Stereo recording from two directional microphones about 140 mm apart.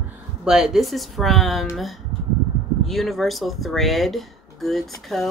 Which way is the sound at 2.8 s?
Centre (ahead or behind).